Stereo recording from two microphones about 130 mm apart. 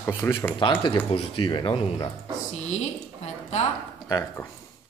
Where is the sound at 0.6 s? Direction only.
40° left (ahead or behind).